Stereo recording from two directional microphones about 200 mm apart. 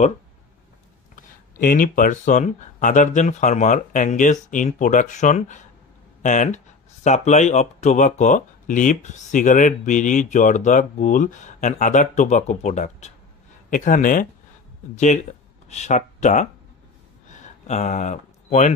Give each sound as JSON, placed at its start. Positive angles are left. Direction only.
{"t": 1.1, "sound": "speech", "side_deg": 45}
{"t": 17.6, "sound": "speech", "side_deg": 35}